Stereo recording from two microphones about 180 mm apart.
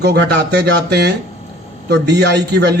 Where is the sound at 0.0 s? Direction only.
70° right (ahead or behind).